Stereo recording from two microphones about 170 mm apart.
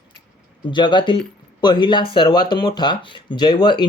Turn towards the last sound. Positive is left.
turn(degrees=25)  # may be behind; listen again after turning